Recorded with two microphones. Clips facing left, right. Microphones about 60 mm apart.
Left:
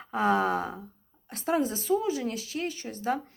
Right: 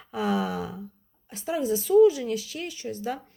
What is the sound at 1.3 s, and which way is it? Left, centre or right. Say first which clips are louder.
A woman's voice: right 1 dB; left.